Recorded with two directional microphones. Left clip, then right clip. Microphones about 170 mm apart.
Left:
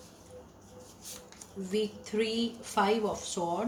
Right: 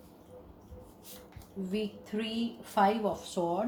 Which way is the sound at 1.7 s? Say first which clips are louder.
Left 5 dB; 35° right (ahead or behind).